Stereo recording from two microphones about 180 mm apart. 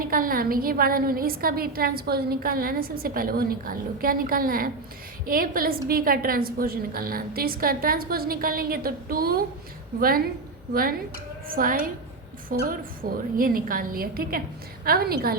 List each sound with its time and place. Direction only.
0.0 s a woman's voice: 50° right (ahead or behind)
11.4 s a woman's voice: 50° right (ahead or behind)